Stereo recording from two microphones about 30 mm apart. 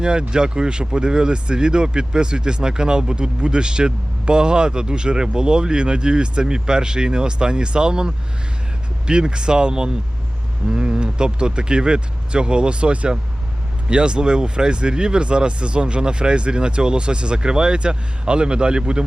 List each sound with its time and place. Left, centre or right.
0.0 s speech: right